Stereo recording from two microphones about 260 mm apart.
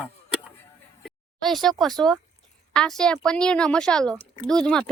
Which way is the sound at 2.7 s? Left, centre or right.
Centre.